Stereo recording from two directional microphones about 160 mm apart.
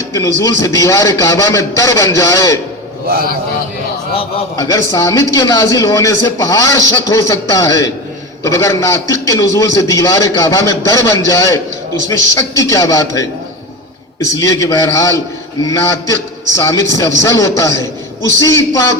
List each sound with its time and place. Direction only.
0.1 s a man's voice: 20° left (ahead or behind)
4.5 s a man's voice: 20° left (ahead or behind)
14.3 s a man's voice: 20° left (ahead or behind)